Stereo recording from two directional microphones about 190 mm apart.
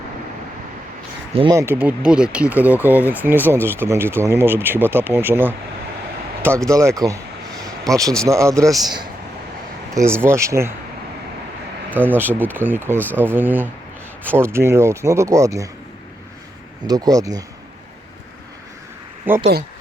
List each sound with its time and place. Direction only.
1.3 s speech: 30° right (ahead or behind)
1.5 s speech: 10° right (ahead or behind)
9.9 s speech: 15° right (ahead or behind)
11.9 s speech: 10° right (ahead or behind)
16.8 s speech: 20° right (ahead or behind)
19.3 s speech: 10° right (ahead or behind)